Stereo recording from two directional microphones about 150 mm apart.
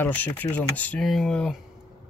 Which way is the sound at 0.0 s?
10° left (ahead or behind).